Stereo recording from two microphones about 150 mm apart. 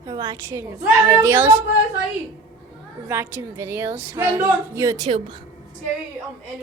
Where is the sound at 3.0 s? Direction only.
15° right (ahead or behind).